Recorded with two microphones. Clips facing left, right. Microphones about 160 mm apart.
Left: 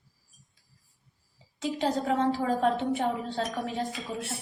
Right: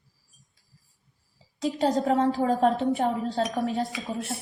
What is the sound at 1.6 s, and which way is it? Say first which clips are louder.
A woman's voice: right 4 dB; 40° right (ahead or behind).